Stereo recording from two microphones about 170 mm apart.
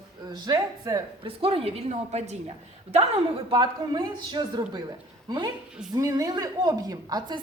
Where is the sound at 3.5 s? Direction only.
25° right (ahead or behind).